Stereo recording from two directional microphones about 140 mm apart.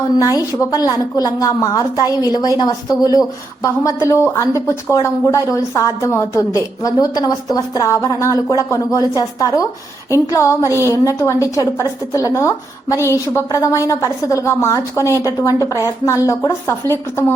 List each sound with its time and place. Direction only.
0.3 s a woman's voice: 25° left (ahead or behind)